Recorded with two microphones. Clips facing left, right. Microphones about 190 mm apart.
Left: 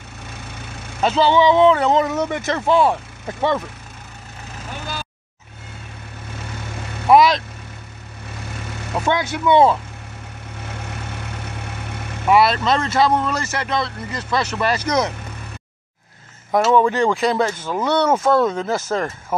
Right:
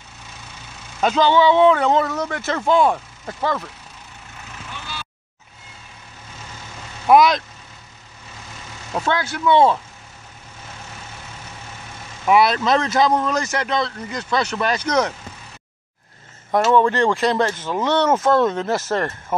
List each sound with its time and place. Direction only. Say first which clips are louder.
1.0 s speech: even; 5° left (ahead or behind)
1.6 s speech: left 1 dB; 5° right (ahead or behind)
2.1 s speech: left 3 dB; 15° left (ahead or behind)
2.5 s speech: even; 5° left (ahead or behind)
4.6 s vehicle: left 6 dB; 45° left (ahead or behind)
7.1 s speech: even; centre (ahead or behind)
9.1 s speech: left 1 dB; 20° left (ahead or behind)
10.6 s vehicle: left 6 dB; 65° left (ahead or behind)
12.3 s speech: even; centre (ahead or behind)
16.5 s speech: left 1 dB; 5° left (ahead or behind)